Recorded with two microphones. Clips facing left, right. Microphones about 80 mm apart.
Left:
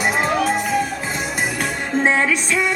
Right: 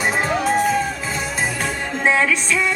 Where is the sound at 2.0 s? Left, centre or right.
Left.